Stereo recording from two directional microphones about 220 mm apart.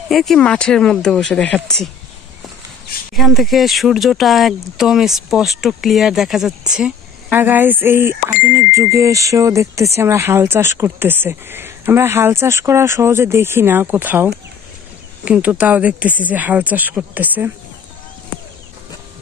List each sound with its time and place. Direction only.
0.1 s speech: centre (ahead or behind)
3.2 s speech: centre (ahead or behind)